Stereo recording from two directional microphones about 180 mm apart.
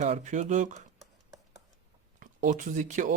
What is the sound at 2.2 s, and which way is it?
Speech, 45° right (ahead or behind).